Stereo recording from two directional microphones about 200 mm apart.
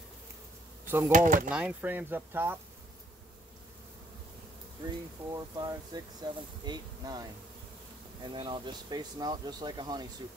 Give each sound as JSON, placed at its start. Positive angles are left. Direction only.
{"t": 0.8, "sound": "speech", "side_deg": -10}
{"t": 1.1, "sound": "speech", "side_deg": -40}
{"t": 1.5, "sound": "speech", "side_deg": -5}
{"t": 4.8, "sound": "speech", "side_deg": -20}